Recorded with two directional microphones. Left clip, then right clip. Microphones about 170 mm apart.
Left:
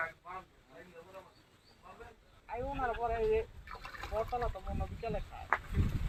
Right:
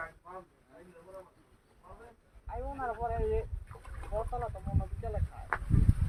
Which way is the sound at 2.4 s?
45° left (ahead or behind).